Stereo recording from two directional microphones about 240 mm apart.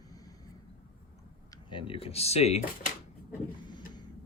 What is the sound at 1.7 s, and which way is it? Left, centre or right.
Music, left.